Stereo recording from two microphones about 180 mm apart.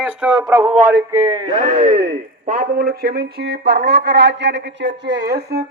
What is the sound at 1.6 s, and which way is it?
A man's voice, 40° right (ahead or behind).